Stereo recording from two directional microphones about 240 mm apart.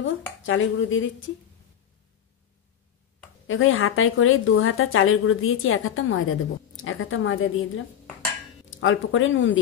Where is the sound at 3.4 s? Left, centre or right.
Left.